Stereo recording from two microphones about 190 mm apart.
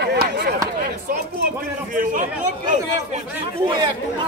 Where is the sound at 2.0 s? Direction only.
45° right (ahead or behind).